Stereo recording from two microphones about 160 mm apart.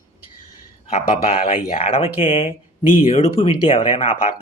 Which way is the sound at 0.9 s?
45° left (ahead or behind).